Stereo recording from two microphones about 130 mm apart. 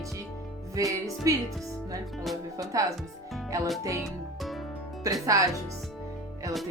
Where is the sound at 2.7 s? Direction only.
25° right (ahead or behind).